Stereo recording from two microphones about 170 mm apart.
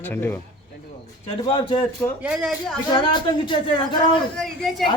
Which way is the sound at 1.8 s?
10° left (ahead or behind).